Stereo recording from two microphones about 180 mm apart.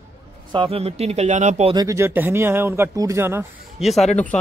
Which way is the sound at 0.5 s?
30° right (ahead or behind).